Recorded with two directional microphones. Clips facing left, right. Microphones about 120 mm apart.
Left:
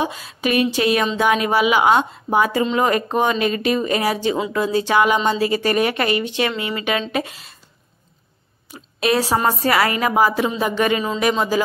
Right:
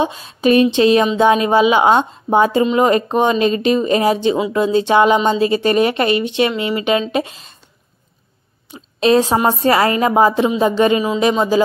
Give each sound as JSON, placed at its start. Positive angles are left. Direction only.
{"t": 0.0, "sound": "a woman's voice", "side_deg": -25}
{"t": 9.0, "sound": "a woman's voice", "side_deg": -25}